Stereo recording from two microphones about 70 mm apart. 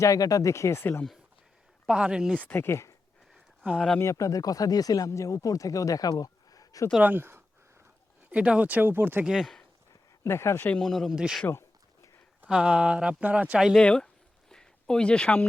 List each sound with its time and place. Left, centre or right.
0.0 s speech: left
1.9 s speech: centre
2.3 s speech: left
2.6 s speech: left
4.0 s speech: left
7.0 s speech: right
8.3 s speech: centre
9.2 s speech: centre
10.2 s speech: left
10.8 s speech: centre
11.1 s speech: centre
12.5 s speech: centre
13.7 s speech: centre
14.5 s a sound: centre